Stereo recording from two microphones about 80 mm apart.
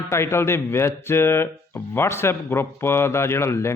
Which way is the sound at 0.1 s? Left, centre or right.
Left.